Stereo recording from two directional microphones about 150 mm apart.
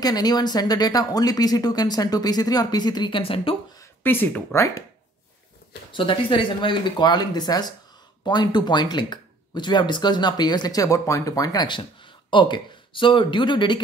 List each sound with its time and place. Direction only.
0.0 s speech: 25° left (ahead or behind)
4.0 s speech: 15° left (ahead or behind)
5.9 s speech: 35° left (ahead or behind)